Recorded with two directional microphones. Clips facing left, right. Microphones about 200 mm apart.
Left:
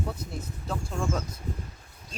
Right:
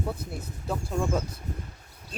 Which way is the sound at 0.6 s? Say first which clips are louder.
Right 3 dB; 10° right (ahead or behind).